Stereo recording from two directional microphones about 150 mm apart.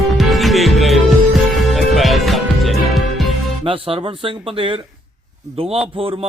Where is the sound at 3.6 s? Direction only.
35° right (ahead or behind).